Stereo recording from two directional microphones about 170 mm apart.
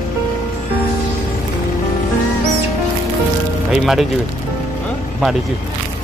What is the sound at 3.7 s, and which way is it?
Speech, centre (ahead or behind).